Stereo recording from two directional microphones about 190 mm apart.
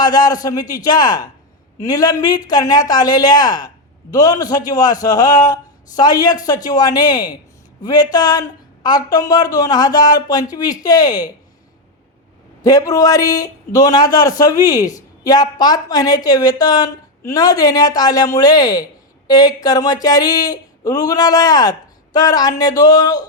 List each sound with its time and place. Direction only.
0.0 s a man's voice: 20° left (ahead or behind)
12.6 s a man's voice: 20° left (ahead or behind)